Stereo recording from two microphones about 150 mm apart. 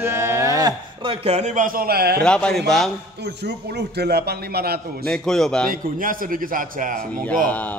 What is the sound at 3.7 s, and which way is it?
A man's voice, 90° right.